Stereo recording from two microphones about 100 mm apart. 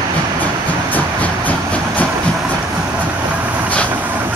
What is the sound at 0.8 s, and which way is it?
Vehicle, 15° left (ahead or behind).